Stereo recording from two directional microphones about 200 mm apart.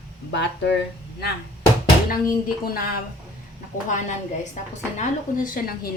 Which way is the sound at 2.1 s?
45° left (ahead or behind).